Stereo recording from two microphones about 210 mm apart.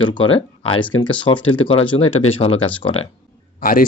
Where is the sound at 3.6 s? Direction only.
40° left (ahead or behind).